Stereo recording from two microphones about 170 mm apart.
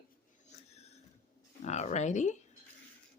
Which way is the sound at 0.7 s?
40° left (ahead or behind).